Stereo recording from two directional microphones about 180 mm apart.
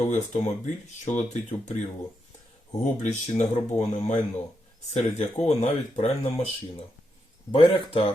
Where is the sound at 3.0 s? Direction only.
40° left (ahead or behind).